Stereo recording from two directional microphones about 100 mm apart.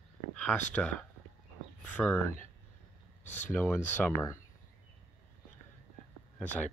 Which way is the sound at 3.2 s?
20° left (ahead or behind).